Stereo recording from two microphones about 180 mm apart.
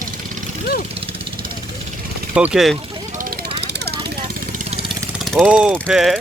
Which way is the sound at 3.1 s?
50° right (ahead or behind).